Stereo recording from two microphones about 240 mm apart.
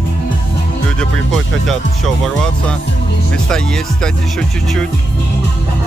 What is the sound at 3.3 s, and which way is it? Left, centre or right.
Speech, centre.